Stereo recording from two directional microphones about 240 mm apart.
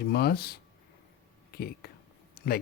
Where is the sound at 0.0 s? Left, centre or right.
Left.